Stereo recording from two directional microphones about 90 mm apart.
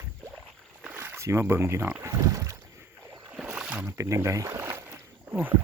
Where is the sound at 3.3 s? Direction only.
15° right (ahead or behind).